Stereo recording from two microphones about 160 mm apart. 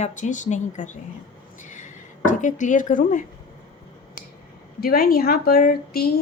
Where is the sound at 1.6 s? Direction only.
50° left (ahead or behind).